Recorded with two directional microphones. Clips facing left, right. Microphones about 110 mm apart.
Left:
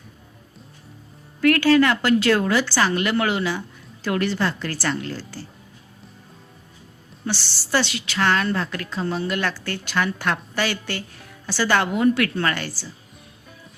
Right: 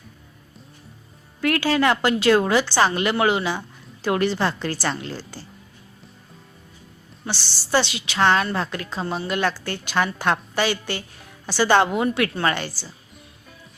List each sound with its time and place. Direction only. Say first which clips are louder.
1.4 s a woman's voice: left 4 dB; 20° right (ahead or behind)
7.3 s a woman's voice: even; 10° right (ahead or behind)